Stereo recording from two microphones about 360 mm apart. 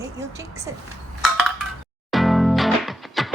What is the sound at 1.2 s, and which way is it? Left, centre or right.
Chink, centre.